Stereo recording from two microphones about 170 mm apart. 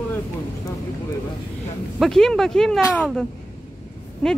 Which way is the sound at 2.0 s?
Centre (ahead or behind).